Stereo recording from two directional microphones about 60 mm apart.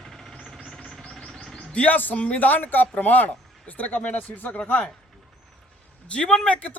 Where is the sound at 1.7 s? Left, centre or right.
Left.